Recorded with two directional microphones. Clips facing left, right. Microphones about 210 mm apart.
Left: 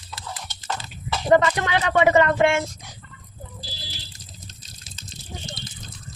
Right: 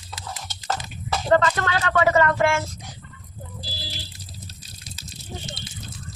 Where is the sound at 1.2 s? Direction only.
15° left (ahead or behind).